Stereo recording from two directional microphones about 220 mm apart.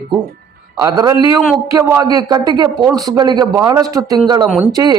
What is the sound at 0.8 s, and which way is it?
A man's voice, 20° right (ahead or behind).